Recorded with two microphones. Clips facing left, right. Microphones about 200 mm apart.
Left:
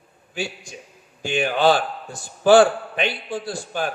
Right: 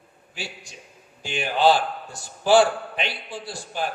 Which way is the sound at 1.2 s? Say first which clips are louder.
Left 2 dB; 55° left (ahead or behind).